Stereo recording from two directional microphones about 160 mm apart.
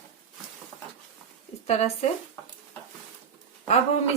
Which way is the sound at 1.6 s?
45° left (ahead or behind).